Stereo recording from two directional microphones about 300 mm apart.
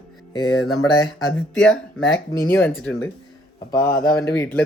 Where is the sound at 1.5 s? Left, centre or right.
Centre.